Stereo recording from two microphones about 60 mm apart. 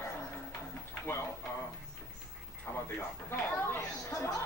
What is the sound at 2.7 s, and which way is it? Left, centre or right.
Speech, left.